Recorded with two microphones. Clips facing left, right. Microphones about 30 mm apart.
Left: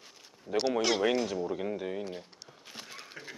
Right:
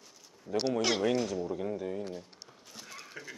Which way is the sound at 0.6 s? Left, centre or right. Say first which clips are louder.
Left 1 dB; centre.